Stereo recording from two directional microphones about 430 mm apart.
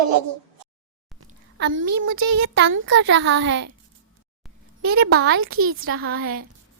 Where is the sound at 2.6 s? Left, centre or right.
Right.